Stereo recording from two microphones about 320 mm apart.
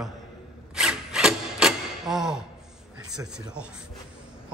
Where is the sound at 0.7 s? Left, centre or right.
Centre.